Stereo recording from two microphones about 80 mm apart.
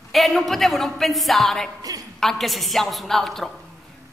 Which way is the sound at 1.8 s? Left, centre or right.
Right.